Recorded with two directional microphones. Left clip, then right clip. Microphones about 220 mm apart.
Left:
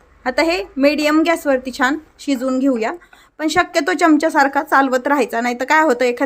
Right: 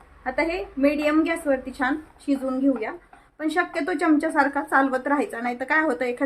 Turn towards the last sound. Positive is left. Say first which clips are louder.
# left 9 dB
turn(degrees=40)  # may be behind; listen again after turning